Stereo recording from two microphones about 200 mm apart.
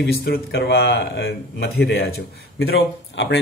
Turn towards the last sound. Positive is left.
turn(degrees=55)  # may be behind; listen again after turning